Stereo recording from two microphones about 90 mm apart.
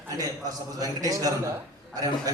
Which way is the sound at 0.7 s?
40° right (ahead or behind).